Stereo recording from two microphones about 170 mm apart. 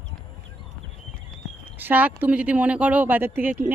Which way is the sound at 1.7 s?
10° right (ahead or behind).